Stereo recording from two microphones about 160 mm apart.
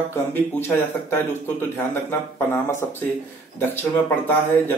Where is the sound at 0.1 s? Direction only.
15° left (ahead or behind).